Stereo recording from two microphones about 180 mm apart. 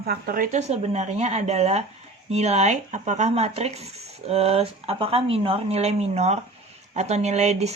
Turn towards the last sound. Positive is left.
turn(degrees=-40)  # may be behind; listen again after turning